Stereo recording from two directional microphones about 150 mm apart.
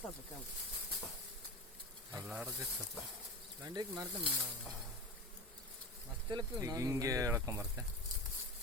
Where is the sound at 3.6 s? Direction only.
25° right (ahead or behind).